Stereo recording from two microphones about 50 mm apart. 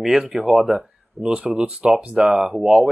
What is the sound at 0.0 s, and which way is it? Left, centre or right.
Speech, centre.